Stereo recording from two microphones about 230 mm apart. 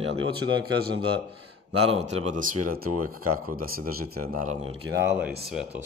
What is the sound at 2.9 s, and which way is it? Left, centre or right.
Speech, right.